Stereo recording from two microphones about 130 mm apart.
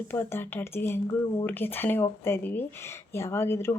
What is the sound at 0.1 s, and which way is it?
Speech, 15° left (ahead or behind).